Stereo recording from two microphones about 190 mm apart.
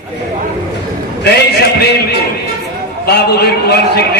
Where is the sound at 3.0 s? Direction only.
60° left (ahead or behind).